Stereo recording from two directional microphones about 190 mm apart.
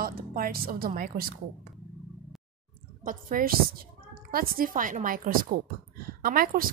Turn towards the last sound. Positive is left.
turn(degrees=-50)  # may be behind; listen again after turning